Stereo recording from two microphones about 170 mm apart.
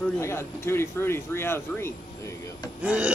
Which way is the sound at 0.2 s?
15° left (ahead or behind).